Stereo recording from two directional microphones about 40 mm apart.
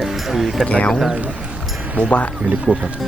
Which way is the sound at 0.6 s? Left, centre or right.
Left.